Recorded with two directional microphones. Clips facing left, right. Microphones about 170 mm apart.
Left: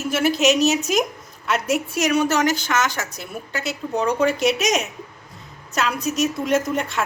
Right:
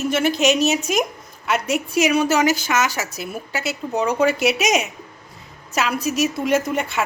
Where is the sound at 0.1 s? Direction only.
5° left (ahead or behind).